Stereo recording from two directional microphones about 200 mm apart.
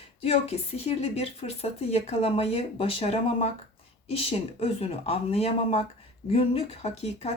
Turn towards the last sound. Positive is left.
turn(degrees=30)  # may be behind; listen again after turning